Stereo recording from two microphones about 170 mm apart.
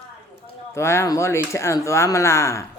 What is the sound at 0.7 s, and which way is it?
A man's voice, 15° left (ahead or behind).